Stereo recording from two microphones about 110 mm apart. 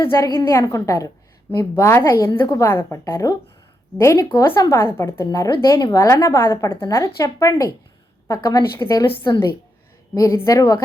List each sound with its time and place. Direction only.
0.3 s a woman's voice: 25° left (ahead or behind)
9.1 s a woman's voice: 45° left (ahead or behind)
10.2 s speech: 25° left (ahead or behind)